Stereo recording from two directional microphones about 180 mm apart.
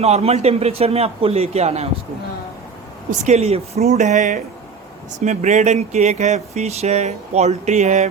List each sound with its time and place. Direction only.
0.0 s speech: 35° right (ahead or behind)
3.1 s speech: 40° right (ahead or behind)